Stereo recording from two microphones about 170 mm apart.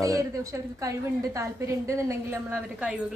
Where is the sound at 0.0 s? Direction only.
20° right (ahead or behind).